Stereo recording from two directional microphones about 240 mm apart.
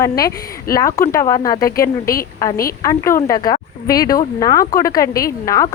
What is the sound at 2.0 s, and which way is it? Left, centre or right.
Speech, left.